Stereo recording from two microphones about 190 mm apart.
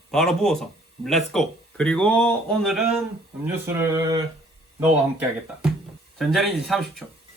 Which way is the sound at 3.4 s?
10° right (ahead or behind).